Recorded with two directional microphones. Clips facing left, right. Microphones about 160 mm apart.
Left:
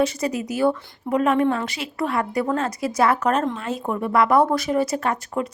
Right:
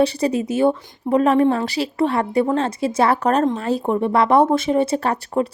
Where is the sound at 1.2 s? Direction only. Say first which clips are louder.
Right 3 dB; 35° right (ahead or behind).